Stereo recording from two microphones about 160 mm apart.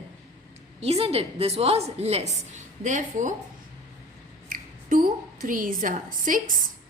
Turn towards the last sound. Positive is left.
turn(degrees=-55)  # may be behind; listen again after turning